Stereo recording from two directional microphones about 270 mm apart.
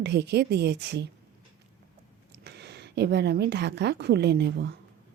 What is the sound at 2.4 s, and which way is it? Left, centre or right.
Speech, right.